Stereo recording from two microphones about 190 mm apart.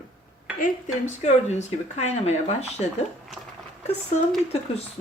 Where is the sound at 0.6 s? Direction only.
40° left (ahead or behind).